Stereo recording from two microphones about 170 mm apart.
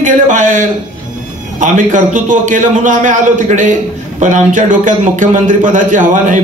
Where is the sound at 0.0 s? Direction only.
50° right (ahead or behind).